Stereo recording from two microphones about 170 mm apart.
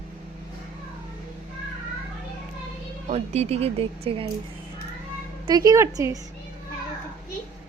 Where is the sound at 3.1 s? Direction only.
40° right (ahead or behind).